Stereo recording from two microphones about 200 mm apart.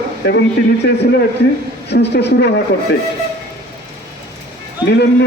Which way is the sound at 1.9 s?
60° left (ahead or behind).